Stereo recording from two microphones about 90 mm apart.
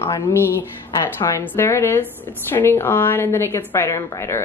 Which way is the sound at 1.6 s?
30° left (ahead or behind).